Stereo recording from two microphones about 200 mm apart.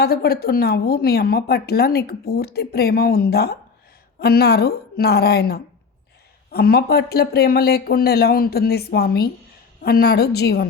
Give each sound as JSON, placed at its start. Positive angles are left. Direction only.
{"t": 0.0, "sound": "speech", "side_deg": 50}